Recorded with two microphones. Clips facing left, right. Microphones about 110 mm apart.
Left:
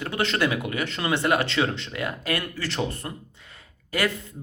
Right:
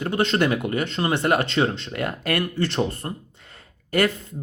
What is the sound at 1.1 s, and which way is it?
Speech, 45° right (ahead or behind).